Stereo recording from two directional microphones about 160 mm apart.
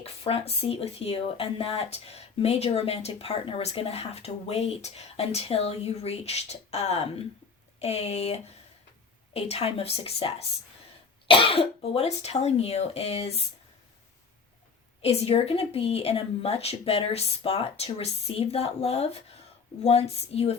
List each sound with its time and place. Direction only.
0.0 s speech: 40° left (ahead or behind)
15.0 s speech: 40° left (ahead or behind)